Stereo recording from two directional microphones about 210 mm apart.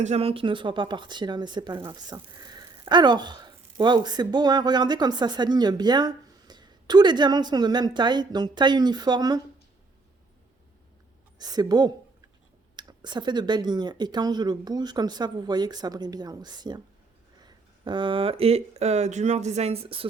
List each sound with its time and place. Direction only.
0.0 s speech: 30° right (ahead or behind)
11.3 s speech: 20° right (ahead or behind)